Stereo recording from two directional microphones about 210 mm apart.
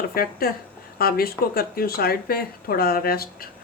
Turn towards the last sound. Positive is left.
turn(degrees=45)  # may be behind; listen again after turning